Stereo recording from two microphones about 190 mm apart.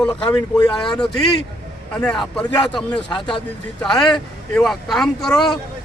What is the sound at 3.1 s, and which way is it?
Speech, 25° left (ahead or behind).